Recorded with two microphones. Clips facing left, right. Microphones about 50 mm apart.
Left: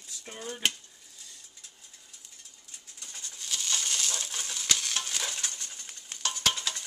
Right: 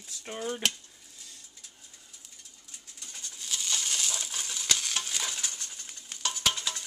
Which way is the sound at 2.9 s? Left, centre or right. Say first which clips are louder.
Even; centre.